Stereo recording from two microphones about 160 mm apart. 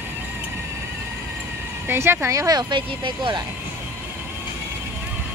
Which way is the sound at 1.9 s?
15° right (ahead or behind).